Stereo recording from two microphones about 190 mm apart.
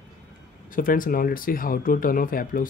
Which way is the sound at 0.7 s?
45° left (ahead or behind).